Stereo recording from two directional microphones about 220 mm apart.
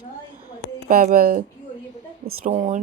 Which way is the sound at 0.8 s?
40° right (ahead or behind).